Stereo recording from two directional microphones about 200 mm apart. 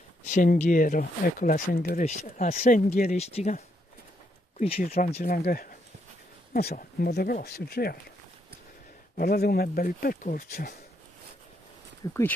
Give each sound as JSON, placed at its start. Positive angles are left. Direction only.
{"t": 0.3, "sound": "speech", "side_deg": 40}
{"t": 9.1, "sound": "speech", "side_deg": 50}
{"t": 12.1, "sound": "speech", "side_deg": 10}